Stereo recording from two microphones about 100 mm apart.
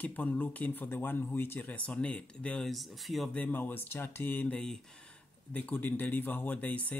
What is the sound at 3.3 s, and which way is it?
Speech, 15° left (ahead or behind).